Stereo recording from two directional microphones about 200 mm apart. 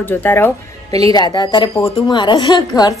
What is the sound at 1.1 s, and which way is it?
A woman's voice, 20° left (ahead or behind).